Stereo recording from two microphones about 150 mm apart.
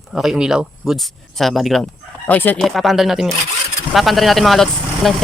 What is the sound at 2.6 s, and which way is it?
Speech, centre (ahead or behind).